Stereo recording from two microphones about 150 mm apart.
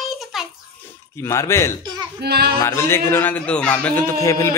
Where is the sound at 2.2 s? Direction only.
90° right.